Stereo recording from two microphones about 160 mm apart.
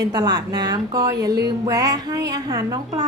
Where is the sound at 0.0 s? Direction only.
25° right (ahead or behind).